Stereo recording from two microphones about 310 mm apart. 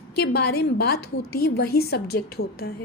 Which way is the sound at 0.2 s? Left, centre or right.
Left.